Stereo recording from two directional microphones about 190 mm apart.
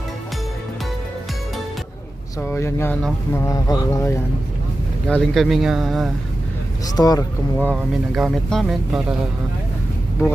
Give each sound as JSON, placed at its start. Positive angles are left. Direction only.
{"t": 2.4, "sound": "speech", "side_deg": 15}
{"t": 5.0, "sound": "speech", "side_deg": 5}
{"t": 6.8, "sound": "speech", "side_deg": 20}
{"t": 7.8, "sound": "speech", "side_deg": 0}